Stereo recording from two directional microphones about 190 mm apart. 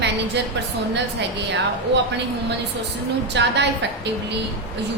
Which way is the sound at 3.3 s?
65° right (ahead or behind).